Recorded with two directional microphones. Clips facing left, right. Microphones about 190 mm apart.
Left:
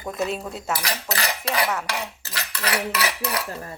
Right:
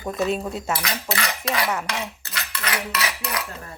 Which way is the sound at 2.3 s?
35° left (ahead or behind).